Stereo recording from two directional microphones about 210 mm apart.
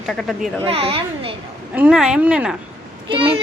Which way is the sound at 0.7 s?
25° right (ahead or behind).